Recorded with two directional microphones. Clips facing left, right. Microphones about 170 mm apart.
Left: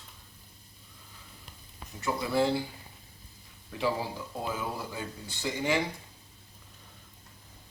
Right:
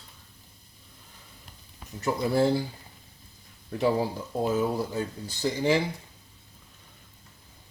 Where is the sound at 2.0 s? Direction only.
40° right (ahead or behind).